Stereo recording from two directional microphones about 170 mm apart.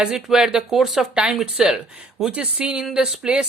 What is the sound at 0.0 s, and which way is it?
Speech, 5° right (ahead or behind).